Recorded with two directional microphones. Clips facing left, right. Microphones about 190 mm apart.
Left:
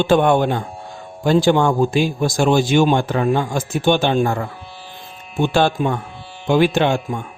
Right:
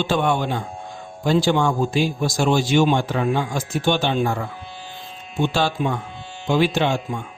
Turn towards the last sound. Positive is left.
turn(degrees=55)  # may be behind; listen again after turning